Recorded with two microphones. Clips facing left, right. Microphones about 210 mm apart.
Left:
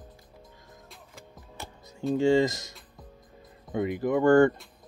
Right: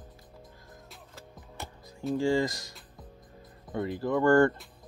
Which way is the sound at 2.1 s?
20° left (ahead or behind).